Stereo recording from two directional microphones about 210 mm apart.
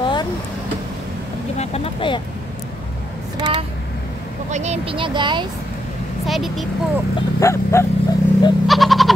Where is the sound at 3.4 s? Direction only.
25° right (ahead or behind).